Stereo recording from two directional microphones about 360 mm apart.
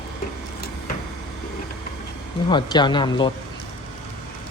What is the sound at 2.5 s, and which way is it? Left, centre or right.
Speech, centre.